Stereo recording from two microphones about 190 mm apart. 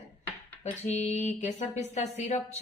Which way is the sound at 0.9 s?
35° left (ahead or behind).